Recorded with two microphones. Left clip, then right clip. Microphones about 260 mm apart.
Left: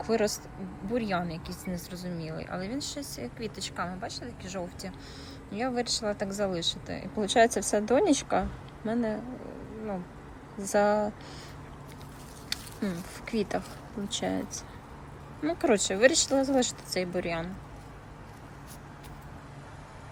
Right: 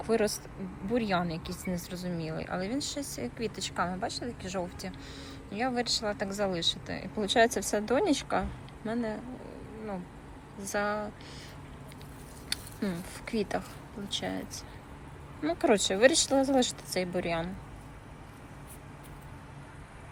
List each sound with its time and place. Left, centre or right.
0.0 s a woman's voice: centre
10.6 s speech: centre
12.5 s a sound: centre
14.1 s speech: centre